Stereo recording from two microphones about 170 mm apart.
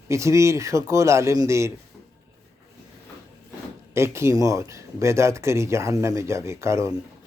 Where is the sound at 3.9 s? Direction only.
15° right (ahead or behind).